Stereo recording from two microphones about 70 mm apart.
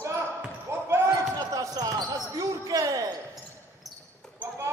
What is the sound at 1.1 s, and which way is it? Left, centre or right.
Basketball bounce, right.